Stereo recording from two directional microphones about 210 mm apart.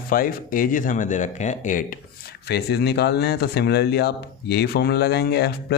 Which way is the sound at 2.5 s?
50° left (ahead or behind).